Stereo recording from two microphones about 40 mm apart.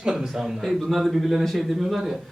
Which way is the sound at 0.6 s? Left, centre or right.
Centre.